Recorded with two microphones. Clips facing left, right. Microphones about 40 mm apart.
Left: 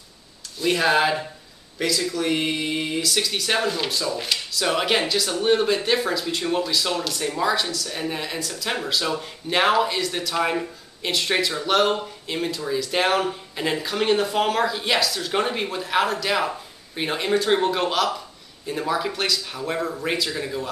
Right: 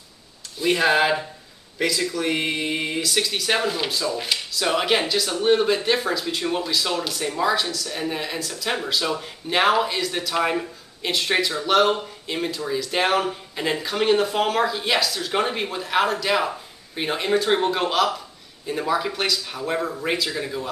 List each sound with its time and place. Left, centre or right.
0.6 s speech: centre